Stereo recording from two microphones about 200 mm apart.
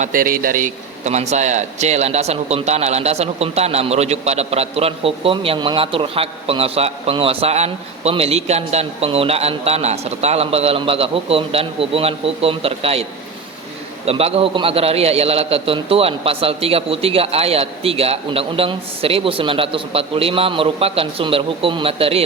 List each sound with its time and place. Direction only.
0.0 s a man's voice: 45° right (ahead or behind); by 22.2 s 30° right (ahead or behind)